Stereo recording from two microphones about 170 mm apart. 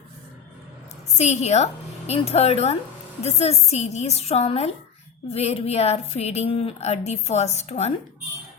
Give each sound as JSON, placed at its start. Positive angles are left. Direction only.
{"t": 1.2, "sound": "speech", "side_deg": 40}